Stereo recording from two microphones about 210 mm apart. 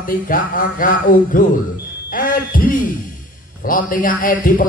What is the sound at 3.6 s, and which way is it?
Speech, 40° left (ahead or behind).